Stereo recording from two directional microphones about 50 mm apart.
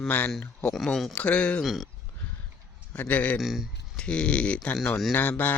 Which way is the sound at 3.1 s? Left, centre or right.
Left.